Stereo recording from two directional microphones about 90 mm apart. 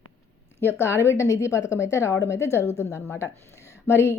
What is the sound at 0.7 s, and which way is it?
A woman's voice, 30° left (ahead or behind).